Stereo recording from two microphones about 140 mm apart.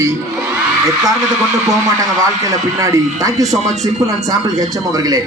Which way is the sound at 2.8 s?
25° right (ahead or behind).